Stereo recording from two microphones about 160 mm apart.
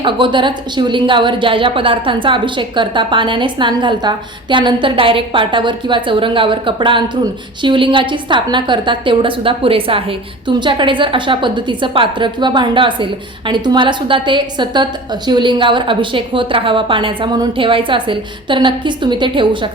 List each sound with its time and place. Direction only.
0.0 s a woman's voice: 30° right (ahead or behind)